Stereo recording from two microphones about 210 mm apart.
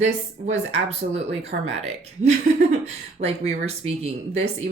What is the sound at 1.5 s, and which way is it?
Speech, 45° right (ahead or behind).